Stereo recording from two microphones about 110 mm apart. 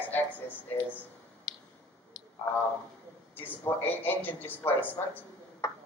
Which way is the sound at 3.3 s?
20° left (ahead or behind).